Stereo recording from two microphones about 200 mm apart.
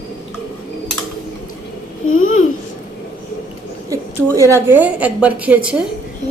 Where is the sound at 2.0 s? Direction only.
90° left.